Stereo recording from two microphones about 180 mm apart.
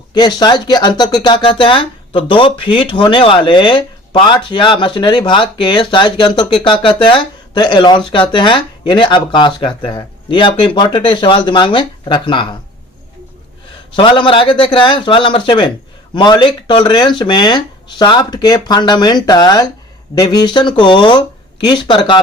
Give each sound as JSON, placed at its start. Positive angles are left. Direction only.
{"t": 0.1, "sound": "speech", "side_deg": 25}
{"t": 13.9, "sound": "speech", "side_deg": 25}